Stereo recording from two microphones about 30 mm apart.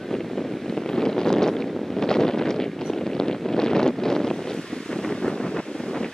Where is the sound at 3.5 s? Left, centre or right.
Centre.